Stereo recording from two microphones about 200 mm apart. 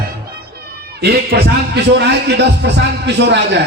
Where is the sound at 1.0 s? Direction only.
55° right (ahead or behind).